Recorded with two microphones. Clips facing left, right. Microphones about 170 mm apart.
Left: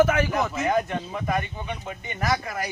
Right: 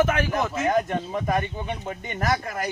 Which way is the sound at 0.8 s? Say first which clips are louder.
Right 2 dB; 45° right (ahead or behind).